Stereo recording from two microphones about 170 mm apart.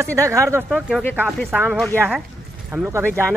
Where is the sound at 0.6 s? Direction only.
5° right (ahead or behind).